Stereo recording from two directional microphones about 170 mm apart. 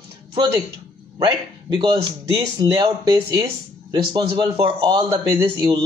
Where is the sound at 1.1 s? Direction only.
25° right (ahead or behind).